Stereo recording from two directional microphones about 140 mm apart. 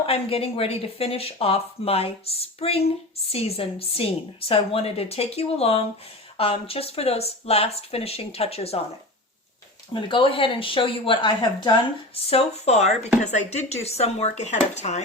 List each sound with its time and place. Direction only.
0.0 s speech: 45° left (ahead or behind)
9.9 s speech: 35° left (ahead or behind)
12.1 s speech: 45° left (ahead or behind)